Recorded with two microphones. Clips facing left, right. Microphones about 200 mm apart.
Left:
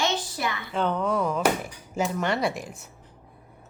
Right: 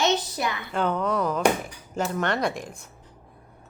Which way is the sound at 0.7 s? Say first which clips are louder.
Even; centre (ahead or behind).